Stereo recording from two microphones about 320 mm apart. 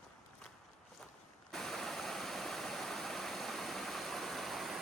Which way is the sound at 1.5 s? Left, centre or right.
Centre.